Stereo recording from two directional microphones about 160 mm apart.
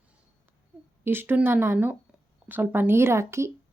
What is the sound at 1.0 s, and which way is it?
Speech, 15° right (ahead or behind).